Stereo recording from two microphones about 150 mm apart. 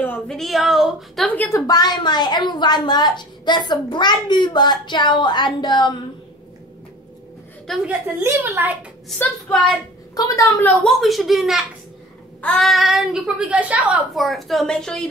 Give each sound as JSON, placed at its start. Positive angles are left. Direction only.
{"t": 0.0, "sound": "a woman's voice", "side_deg": 5}
{"t": 1.3, "sound": "a woman's voice", "side_deg": 10}
{"t": 1.7, "sound": "a woman's voice", "side_deg": 30}
{"t": 7.6, "sound": "a woman's voice", "side_deg": 0}
{"t": 8.2, "sound": "a woman's voice", "side_deg": -15}
{"t": 10.1, "sound": "a woman's voice", "side_deg": 20}